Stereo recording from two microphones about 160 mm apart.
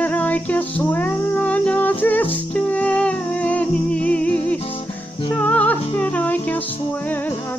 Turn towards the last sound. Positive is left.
turn(degrees=10)  # may be behind; listen again after turning